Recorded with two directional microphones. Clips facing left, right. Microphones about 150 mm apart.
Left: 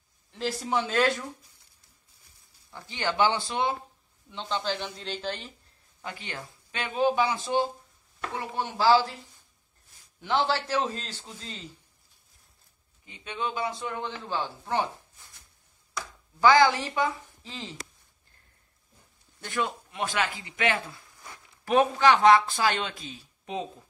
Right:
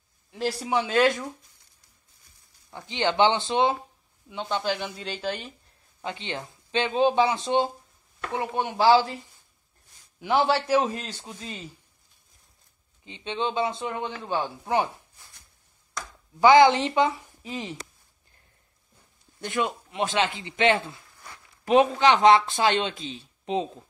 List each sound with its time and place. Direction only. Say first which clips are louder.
0.6 s a man's voice: right 3 dB; 15° right (ahead or behind)
2.7 s a man's voice: right 5 dB; 20° right (ahead or behind)
6.0 s speech: right 5 dB; 25° right (ahead or behind)
10.2 s a man's voice: right 4 dB; 15° right (ahead or behind)
13.0 s speech: right 4 dB; 25° right (ahead or behind)
16.3 s speech: right 4 dB; 20° right (ahead or behind)
19.4 s speech: right 3 dB; 20° right (ahead or behind)